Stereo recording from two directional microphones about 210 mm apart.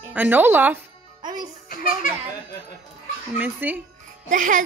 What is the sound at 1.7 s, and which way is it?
Speech, 40° left (ahead or behind).